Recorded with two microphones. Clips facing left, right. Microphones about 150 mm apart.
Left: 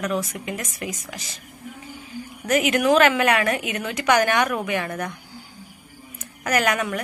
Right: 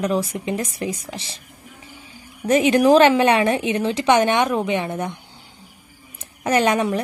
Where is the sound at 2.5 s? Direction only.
30° right (ahead or behind).